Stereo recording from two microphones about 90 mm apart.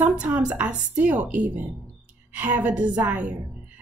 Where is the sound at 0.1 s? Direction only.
10° right (ahead or behind).